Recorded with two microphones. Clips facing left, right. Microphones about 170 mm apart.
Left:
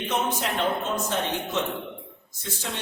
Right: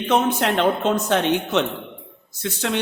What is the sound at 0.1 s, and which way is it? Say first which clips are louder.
A man's voice: right 9 dB; 70° right (ahead or behind).